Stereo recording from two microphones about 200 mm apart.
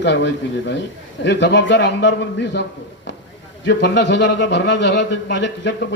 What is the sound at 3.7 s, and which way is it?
A woman's voice, 60° left (ahead or behind).